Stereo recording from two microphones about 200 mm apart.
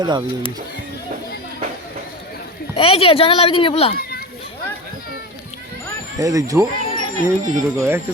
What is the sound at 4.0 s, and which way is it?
Children playing, 50° left (ahead or behind).